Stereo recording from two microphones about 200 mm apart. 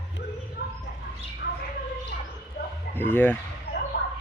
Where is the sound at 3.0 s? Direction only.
10° left (ahead or behind).